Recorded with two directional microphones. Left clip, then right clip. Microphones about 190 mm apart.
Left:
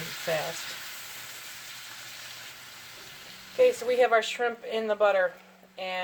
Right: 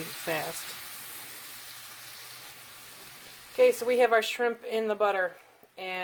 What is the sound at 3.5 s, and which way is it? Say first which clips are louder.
Speech: even; 50° right (ahead or behind).